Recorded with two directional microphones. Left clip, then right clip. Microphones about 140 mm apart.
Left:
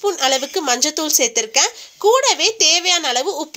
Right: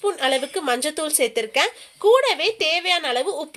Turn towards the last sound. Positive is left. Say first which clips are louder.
# left 3 dB
turn(degrees=30)  # may be behind; listen again after turning